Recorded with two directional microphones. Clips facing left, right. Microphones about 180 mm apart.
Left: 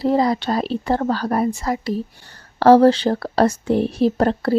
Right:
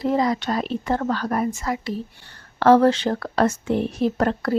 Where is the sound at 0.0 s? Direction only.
35° left (ahead or behind).